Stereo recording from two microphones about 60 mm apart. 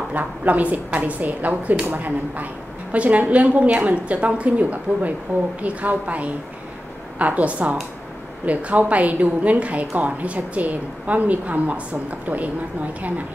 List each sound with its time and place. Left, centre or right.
0.1 s a woman's voice: right